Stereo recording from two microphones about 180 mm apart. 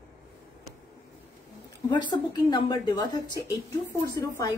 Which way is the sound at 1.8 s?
25° left (ahead or behind).